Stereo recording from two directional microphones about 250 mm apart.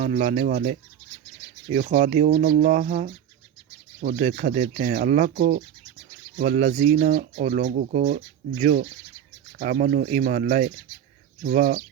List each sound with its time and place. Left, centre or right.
0.0 s speech: right
1.7 s speech: right